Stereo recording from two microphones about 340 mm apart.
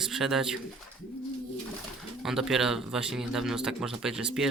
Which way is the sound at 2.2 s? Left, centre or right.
Centre.